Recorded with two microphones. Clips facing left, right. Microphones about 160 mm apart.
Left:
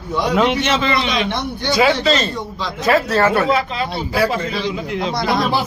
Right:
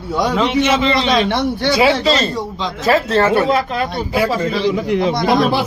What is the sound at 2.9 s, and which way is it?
Speech, 25° right (ahead or behind).